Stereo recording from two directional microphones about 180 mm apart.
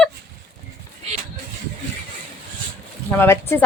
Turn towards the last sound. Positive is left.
turn(degrees=10)  # may be behind; listen again after turning